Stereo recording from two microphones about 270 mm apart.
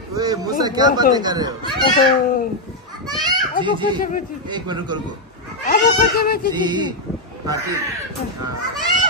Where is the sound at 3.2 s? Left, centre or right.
Centre.